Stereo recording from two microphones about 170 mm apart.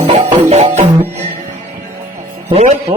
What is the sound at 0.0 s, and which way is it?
Music, 40° right (ahead or behind).